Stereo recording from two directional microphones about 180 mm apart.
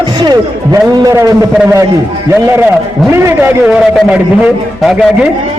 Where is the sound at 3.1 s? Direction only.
15° right (ahead or behind).